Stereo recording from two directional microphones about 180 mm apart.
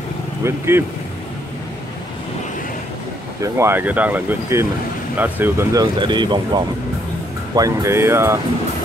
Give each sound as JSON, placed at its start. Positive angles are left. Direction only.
{"t": 0.4, "sound": "speech", "side_deg": -15}
{"t": 3.3, "sound": "speech", "side_deg": -15}